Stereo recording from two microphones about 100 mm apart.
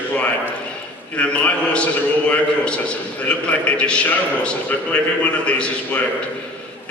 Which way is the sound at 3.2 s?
15° left (ahead or behind).